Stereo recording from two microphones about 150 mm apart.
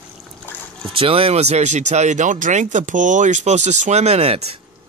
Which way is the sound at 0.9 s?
40° right (ahead or behind).